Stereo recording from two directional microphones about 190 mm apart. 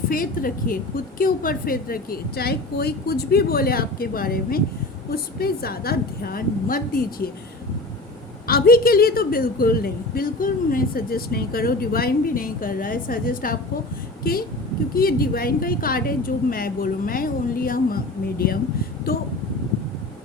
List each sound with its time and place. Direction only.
0.1 s a woman's voice: 50° left (ahead or behind)
8.4 s a woman's voice: 50° left (ahead or behind)